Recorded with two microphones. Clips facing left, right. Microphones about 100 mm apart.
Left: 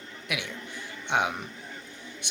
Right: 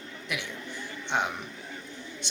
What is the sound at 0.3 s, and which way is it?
Speech, 55° left (ahead or behind).